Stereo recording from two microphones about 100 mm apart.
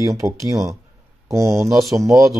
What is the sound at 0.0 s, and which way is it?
Speech, 35° right (ahead or behind).